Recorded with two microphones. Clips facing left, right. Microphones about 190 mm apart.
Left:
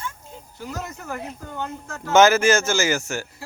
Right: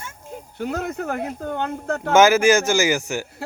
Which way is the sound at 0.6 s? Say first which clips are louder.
Right 8 dB; 60° right (ahead or behind).